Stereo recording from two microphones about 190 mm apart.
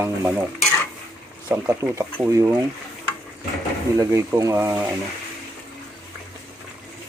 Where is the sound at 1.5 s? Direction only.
15° right (ahead or behind).